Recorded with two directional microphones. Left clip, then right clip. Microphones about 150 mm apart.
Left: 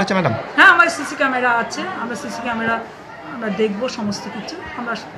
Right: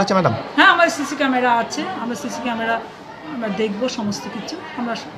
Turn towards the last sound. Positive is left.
turn(degrees=-10)  # may be behind; listen again after turning